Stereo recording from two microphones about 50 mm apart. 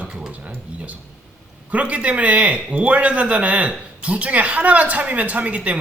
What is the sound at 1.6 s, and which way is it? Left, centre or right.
Speech, right.